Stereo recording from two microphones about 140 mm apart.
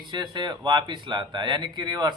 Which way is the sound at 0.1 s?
30° right (ahead or behind).